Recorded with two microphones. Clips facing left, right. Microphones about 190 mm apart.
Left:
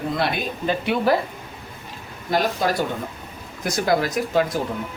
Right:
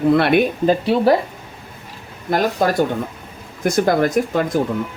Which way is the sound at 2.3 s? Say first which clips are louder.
Right 4 dB; 50° right (ahead or behind).